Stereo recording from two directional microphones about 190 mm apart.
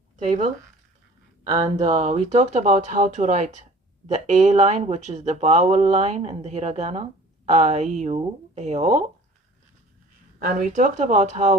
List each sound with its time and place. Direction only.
0.3 s speech: 40° right (ahead or behind)
1.7 s speech: 35° right (ahead or behind)
10.4 s speech: 40° right (ahead or behind)